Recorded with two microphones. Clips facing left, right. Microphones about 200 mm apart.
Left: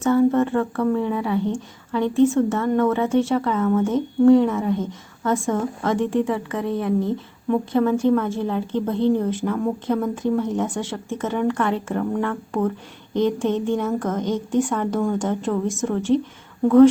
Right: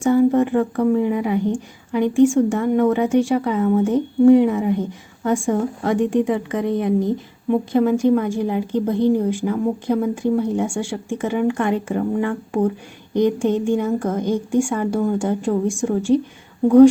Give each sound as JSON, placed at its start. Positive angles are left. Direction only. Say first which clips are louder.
{"t": 0.0, "sound": "a woman's voice", "louder": "right 2 dB", "side_deg": -15}